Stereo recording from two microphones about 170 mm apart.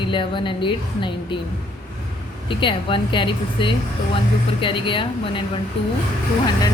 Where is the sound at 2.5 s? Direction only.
30° left (ahead or behind).